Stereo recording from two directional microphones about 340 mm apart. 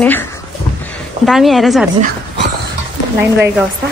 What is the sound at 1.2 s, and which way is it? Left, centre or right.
Speech, centre.